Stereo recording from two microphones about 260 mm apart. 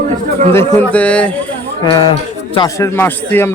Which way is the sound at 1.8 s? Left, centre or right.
Centre.